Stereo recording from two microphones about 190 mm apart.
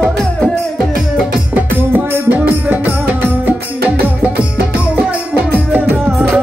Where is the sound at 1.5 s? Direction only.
10° right (ahead or behind).